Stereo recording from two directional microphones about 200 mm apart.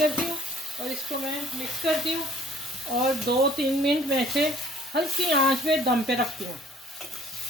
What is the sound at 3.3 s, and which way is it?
Speech, 55° right (ahead or behind).